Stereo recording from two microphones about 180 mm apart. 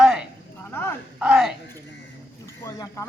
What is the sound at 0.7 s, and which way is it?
Speech, 10° left (ahead or behind).